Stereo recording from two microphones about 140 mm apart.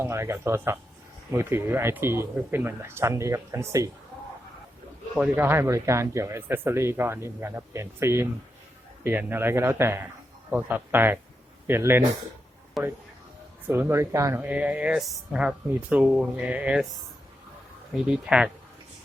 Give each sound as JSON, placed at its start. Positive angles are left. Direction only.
{"t": 0.0, "sound": "speech", "side_deg": -20}
{"t": 5.2, "sound": "speech", "side_deg": -15}
{"t": 12.8, "sound": "speech", "side_deg": 0}
{"t": 13.7, "sound": "speech", "side_deg": -15}
{"t": 17.9, "sound": "speech", "side_deg": -5}